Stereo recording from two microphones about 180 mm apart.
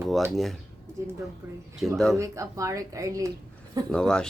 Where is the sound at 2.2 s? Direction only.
15° right (ahead or behind).